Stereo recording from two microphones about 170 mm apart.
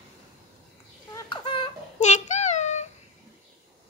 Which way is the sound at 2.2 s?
45° left (ahead or behind).